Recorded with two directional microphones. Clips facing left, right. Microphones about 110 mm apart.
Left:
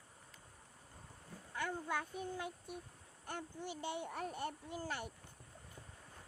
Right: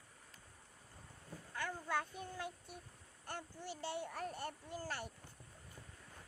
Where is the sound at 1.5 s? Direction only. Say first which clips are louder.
Left 1 dB; 20° left (ahead or behind).